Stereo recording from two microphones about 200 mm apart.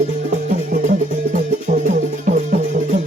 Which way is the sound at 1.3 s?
40° right (ahead or behind).